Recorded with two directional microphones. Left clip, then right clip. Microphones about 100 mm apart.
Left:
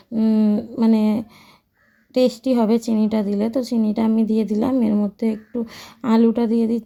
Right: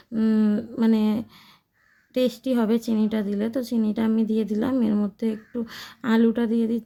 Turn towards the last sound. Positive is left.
turn(degrees=15)  # may be behind; listen again after turning